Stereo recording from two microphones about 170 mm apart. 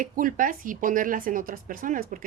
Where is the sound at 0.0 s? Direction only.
55° right (ahead or behind).